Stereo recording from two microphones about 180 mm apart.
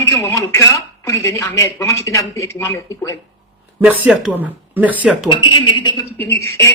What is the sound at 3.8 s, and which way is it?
Speech, 5° right (ahead or behind).